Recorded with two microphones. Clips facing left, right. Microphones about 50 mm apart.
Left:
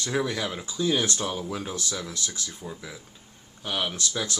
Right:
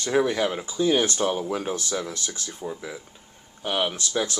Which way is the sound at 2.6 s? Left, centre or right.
Centre.